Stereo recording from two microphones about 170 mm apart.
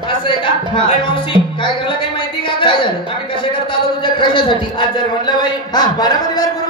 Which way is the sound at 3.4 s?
30° left (ahead or behind).